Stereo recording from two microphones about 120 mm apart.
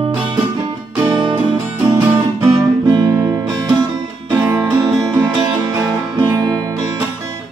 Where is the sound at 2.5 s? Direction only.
35° right (ahead or behind).